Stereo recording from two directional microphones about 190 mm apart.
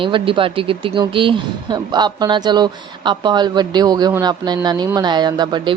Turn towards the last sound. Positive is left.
turn(degrees=-20)  # may be behind; listen again after turning